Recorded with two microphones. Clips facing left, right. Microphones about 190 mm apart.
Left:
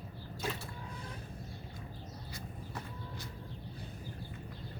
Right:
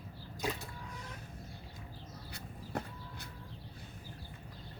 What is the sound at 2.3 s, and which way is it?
Vehicle, 60° right (ahead or behind).